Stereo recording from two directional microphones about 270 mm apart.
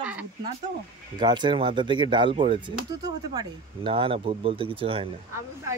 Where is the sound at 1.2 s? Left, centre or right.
Centre.